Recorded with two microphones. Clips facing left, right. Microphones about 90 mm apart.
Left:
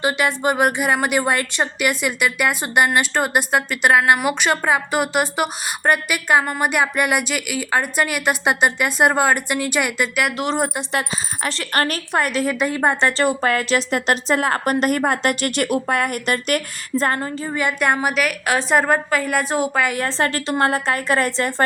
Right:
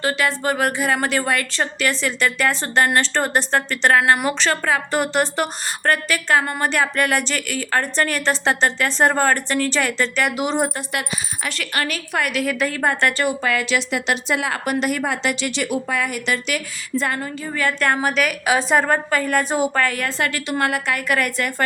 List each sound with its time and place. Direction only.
0.0 s a woman's voice: 20° left (ahead or behind)
10.3 s a woman's voice: centre (ahead or behind)
10.8 s speech: 30° left (ahead or behind)
11.7 s a woman's voice: 40° left (ahead or behind)
17.5 s a woman's voice: 20° left (ahead or behind); by 19.8 s centre (ahead or behind)
19.8 s a woman's voice: 25° left (ahead or behind)